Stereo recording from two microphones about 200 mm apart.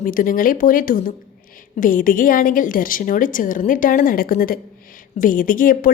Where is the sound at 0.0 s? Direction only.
45° left (ahead or behind).